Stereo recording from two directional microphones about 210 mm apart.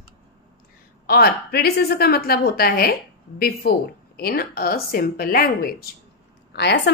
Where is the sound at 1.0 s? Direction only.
50° left (ahead or behind).